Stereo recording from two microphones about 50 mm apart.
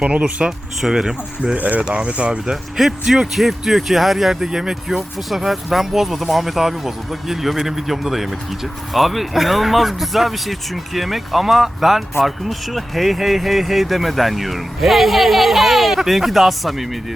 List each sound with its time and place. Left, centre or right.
0.1 s speech: right
0.8 s speech: centre
1.5 s speech: right
2.7 s speech: centre